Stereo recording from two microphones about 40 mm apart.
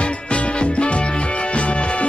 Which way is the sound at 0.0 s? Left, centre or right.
Left.